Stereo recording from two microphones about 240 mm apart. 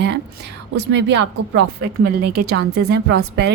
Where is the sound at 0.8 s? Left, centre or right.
Right.